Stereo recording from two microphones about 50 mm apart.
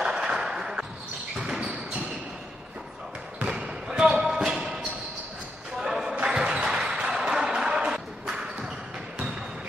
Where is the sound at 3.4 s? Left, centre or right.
Centre.